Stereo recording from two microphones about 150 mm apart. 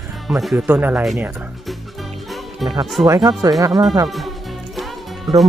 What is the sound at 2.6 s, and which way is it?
Music, centre (ahead or behind).